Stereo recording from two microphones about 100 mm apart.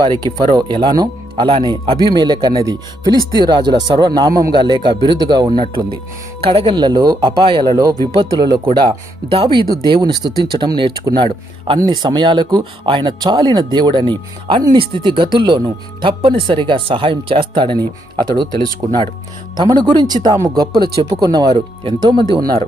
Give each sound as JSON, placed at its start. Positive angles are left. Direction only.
{"t": 0.4, "sound": "speech", "side_deg": -50}
{"t": 6.4, "sound": "speech", "side_deg": -60}
{"t": 8.3, "sound": "speech", "side_deg": -45}
{"t": 9.3, "sound": "speech", "side_deg": -60}
{"t": 19.5, "sound": "speech", "side_deg": -45}